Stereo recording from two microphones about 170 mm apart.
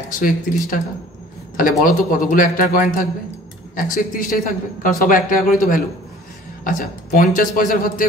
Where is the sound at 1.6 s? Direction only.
55° left (ahead or behind).